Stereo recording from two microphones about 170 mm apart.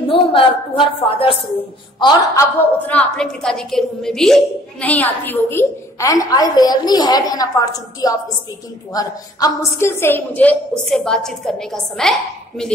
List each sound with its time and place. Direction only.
0.1 s a woman's voice: 30° left (ahead or behind)
2.6 s a woman's voice: 10° left (ahead or behind)